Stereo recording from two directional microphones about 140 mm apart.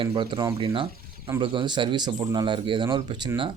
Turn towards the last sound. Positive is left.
turn(degrees=-30)  # may be behind; listen again after turning